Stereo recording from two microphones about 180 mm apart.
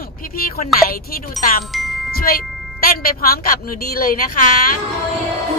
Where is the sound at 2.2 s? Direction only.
55° left (ahead or behind).